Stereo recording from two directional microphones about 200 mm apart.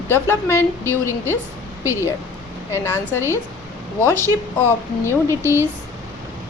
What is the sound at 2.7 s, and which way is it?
Speech, 10° left (ahead or behind).